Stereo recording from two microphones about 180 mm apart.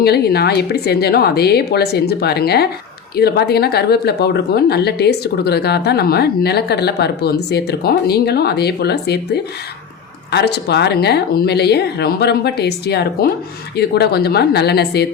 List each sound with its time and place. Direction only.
0.0 s speech: 60° left (ahead or behind)